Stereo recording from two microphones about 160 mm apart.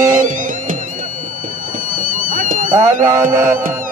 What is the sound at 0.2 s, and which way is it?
Music, 55° right (ahead or behind).